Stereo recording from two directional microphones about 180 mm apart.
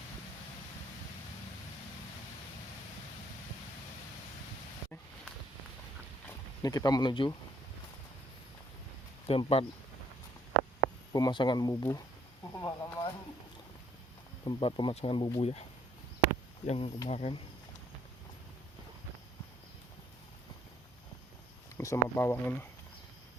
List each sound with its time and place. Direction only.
6.6 s speech: 20° left (ahead or behind)
9.2 s speech: 30° left (ahead or behind)
11.1 s speech: 25° left (ahead or behind)
12.5 s a sound: 15° left (ahead or behind)
14.4 s speech: 25° left (ahead or behind)
16.6 s speech: 35° left (ahead or behind)
21.8 s speech: 15° left (ahead or behind)